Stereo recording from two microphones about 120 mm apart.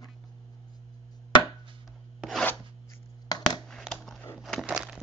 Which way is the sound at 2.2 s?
Centre (ahead or behind).